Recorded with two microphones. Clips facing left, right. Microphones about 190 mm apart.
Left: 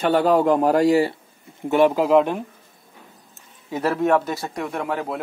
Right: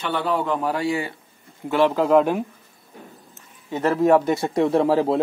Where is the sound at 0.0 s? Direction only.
40° left (ahead or behind).